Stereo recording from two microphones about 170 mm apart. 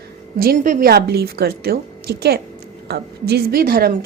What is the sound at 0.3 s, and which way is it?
A woman's voice, 55° right (ahead or behind).